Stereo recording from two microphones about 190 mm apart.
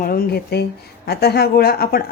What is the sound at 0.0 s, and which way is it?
A woman's voice, 50° left (ahead or behind).